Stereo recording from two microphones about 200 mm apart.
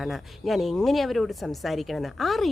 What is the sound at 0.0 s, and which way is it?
Speech, centre (ahead or behind).